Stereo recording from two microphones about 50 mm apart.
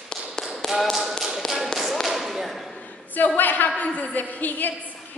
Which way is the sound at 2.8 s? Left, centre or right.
Left.